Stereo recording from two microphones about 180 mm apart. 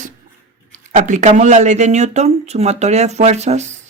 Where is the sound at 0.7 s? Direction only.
45° right (ahead or behind).